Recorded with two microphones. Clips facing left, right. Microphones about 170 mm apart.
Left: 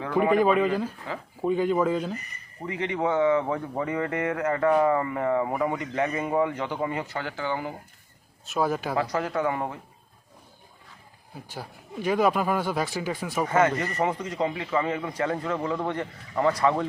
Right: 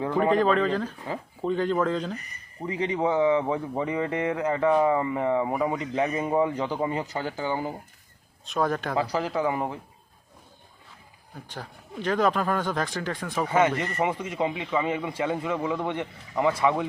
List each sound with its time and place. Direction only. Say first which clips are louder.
0.2 s speech: left 2 dB; 10° left (ahead or behind)
2.6 s speech: right 1 dB; 15° right (ahead or behind)
8.4 s a man's voice: even; 5° left (ahead or behind)
9.1 s speech: even; 15° right (ahead or behind)
11.4 s speech: left 1 dB; 10° left (ahead or behind)
13.5 s a man's voice: even; 10° right (ahead or behind)